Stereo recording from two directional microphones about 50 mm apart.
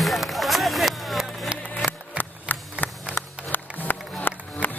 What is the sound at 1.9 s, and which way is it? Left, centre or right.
Music, left.